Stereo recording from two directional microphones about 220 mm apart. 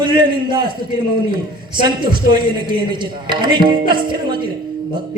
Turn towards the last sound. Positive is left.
turn(degrees=-20)  # may be behind; listen again after turning